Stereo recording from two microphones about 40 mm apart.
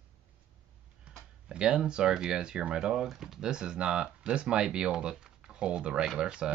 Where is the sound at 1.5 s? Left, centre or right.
Right.